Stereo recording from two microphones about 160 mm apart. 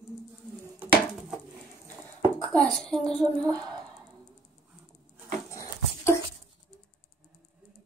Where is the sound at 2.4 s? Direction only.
5° left (ahead or behind).